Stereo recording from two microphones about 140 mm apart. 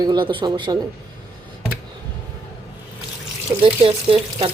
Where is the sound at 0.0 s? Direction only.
35° right (ahead or behind).